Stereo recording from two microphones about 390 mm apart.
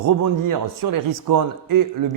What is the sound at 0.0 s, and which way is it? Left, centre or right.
A man's voice, right.